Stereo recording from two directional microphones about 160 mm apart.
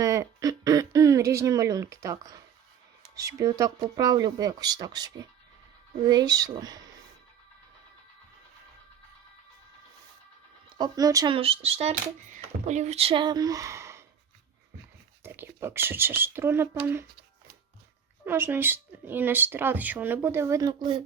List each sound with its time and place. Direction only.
0.0 s a sound: 20° right (ahead or behind)
3.2 s speech: 20° right (ahead or behind)
10.7 s speech: 25° right (ahead or behind)
11.3 s speech: 35° right (ahead or behind); by 14.0 s 15° right (ahead or behind)
15.2 s speech: 15° right (ahead or behind)
18.3 s speech: 15° right (ahead or behind)